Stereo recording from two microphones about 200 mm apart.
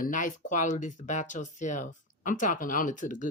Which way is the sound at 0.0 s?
40° left (ahead or behind).